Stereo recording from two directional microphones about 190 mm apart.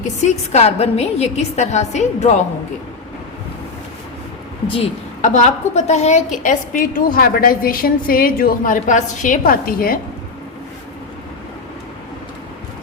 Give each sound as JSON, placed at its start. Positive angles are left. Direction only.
{"t": 0.3, "sound": "a woman's voice", "side_deg": 35}
{"t": 5.2, "sound": "a woman's voice", "side_deg": 40}